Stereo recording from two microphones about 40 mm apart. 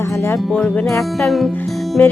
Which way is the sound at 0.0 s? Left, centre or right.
Left.